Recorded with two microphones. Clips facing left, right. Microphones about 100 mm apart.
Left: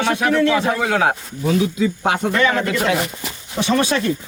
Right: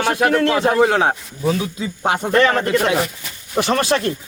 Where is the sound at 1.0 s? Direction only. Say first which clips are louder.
Even; 30° right (ahead or behind).